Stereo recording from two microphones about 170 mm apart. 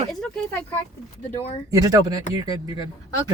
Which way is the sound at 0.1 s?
5° left (ahead or behind).